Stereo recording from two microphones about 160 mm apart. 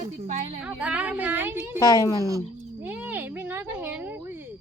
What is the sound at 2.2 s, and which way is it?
Speech, 20° right (ahead or behind).